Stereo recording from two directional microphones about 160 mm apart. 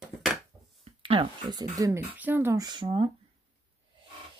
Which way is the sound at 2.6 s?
30° right (ahead or behind).